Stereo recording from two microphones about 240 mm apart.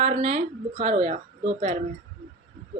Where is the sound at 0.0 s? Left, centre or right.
Right.